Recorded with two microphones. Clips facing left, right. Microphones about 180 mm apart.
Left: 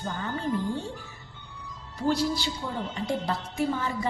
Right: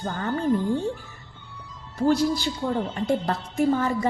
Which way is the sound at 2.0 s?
50° right (ahead or behind).